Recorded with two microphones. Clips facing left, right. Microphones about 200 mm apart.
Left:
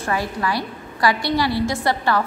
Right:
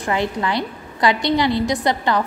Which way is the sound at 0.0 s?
20° right (ahead or behind).